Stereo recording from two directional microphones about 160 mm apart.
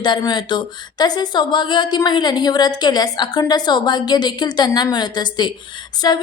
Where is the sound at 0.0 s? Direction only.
25° left (ahead or behind).